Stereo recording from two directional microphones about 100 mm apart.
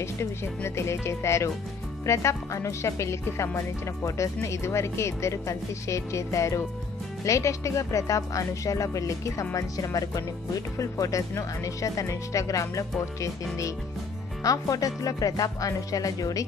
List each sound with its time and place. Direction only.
0.0 s speech: 25° left (ahead or behind)
14.4 s speech: 35° left (ahead or behind)